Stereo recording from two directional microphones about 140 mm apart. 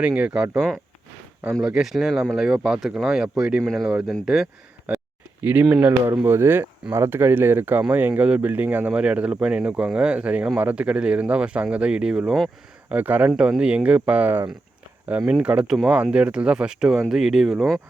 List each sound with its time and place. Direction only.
0.0 s speech: 10° right (ahead or behind)
5.4 s speech: 15° right (ahead or behind)